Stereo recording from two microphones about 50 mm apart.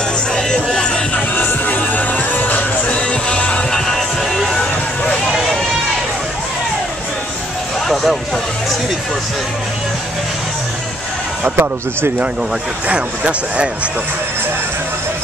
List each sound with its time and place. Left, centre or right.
0.7 s music: centre
1.3 s music: left
3.7 s music: centre
7.9 s a sound: centre
11.4 s speech: right
12.8 s speech: right